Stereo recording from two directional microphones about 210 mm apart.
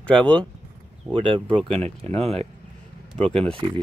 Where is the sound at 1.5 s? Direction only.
5° left (ahead or behind).